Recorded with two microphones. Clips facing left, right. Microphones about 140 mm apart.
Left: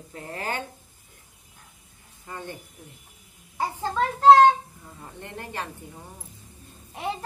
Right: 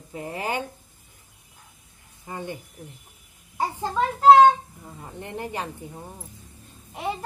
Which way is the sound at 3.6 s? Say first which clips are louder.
Right 1 dB; 10° right (ahead or behind).